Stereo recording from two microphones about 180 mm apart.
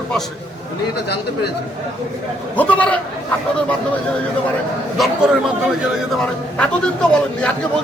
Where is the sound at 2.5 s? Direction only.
10° left (ahead or behind).